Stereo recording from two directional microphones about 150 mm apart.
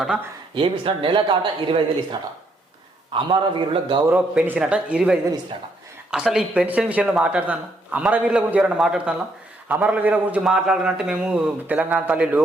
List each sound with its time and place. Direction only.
0.5 s speech: 35° right (ahead or behind)
3.1 s speech: 35° right (ahead or behind)
4.1 s speech: 10° right (ahead or behind)